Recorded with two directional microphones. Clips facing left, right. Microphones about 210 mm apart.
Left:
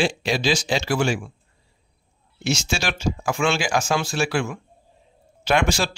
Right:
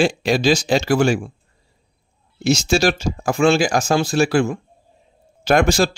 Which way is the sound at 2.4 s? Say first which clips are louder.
Right 8 dB; 40° right (ahead or behind).